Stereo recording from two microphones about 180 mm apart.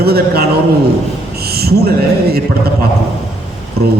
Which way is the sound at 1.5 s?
60° right (ahead or behind).